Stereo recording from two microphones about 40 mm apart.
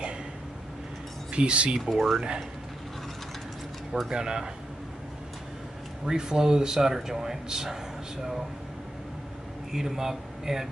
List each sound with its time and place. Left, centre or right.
1.3 s speech: right
1.9 s speech: centre
2.1 s speech: right
4.1 s speech: centre
6.0 s speech: centre
9.7 s speech: centre